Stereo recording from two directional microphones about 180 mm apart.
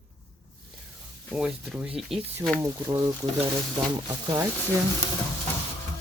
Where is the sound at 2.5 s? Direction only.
15° right (ahead or behind).